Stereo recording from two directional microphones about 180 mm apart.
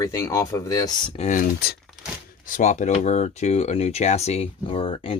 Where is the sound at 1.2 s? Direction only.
45° left (ahead or behind).